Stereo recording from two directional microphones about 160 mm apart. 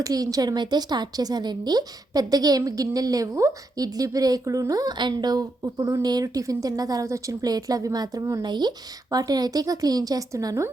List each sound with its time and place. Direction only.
0.0 s a woman's voice: 20° right (ahead or behind)